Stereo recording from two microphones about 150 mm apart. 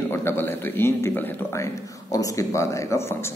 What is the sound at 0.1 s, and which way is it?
A man's voice, 15° left (ahead or behind).